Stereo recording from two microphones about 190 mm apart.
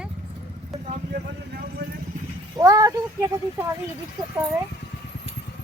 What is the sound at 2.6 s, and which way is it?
Speech, 20° right (ahead or behind).